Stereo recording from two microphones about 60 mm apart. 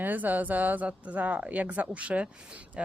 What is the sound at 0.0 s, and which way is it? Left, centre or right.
A woman's voice, right.